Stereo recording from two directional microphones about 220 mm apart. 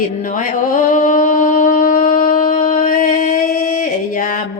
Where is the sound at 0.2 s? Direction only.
35° left (ahead or behind).